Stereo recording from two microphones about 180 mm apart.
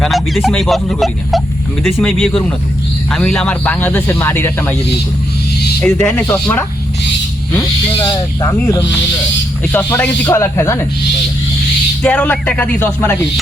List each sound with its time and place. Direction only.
0.0 s speech: centre (ahead or behind)
5.8 s speech: 5° left (ahead or behind)
7.5 s speech: 20° left (ahead or behind)
12.0 s speech: 5° left (ahead or behind)